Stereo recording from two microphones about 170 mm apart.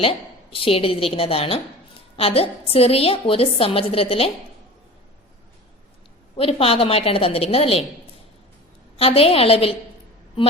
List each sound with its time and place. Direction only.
0.0 s a woman's voice: 30° left (ahead or behind)
6.3 s a woman's voice: 35° left (ahead or behind)
9.0 s a woman's voice: 35° left (ahead or behind)